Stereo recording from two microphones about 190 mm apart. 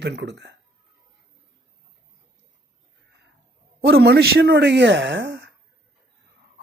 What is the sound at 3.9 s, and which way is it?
Speech, 60° right (ahead or behind).